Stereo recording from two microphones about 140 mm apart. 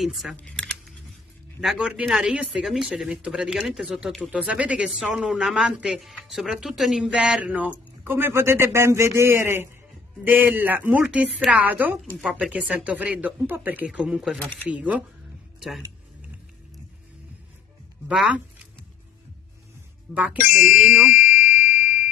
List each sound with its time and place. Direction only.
0.0 s speech: centre (ahead or behind)
0.4 s typing: 5° left (ahead or behind)
1.6 s speech: 5° right (ahead or behind)
14.4 s speech: 10° left (ahead or behind)
14.7 s speech: 10° right (ahead or behind)
18.0 s speech: 5° right (ahead or behind)
20.3 s speech: 75° left (ahead or behind)
20.7 s speech: 5° right (ahead or behind)
21.1 s music: 70° left (ahead or behind)